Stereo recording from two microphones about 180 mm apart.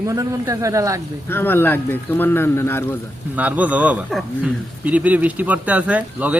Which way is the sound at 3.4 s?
10° right (ahead or behind).